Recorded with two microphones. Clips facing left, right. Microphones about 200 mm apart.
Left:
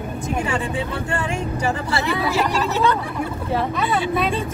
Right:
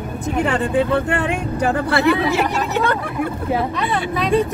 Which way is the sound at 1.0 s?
60° right (ahead or behind).